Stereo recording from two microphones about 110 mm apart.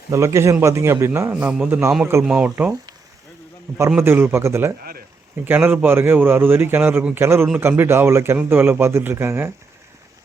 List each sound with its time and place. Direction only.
0.1 s a man's voice: 25° right (ahead or behind); by 2.7 s 10° right (ahead or behind)
3.7 s a man's voice: 25° right (ahead or behind)